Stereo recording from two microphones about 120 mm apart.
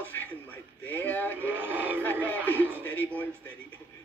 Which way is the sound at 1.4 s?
15° right (ahead or behind).